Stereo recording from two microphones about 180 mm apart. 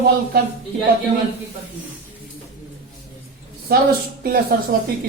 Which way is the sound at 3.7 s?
60° right (ahead or behind).